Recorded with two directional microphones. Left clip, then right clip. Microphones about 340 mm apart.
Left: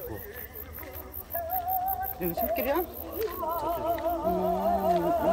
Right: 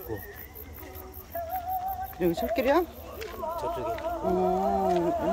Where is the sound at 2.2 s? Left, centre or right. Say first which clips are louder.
Right 4 dB; centre.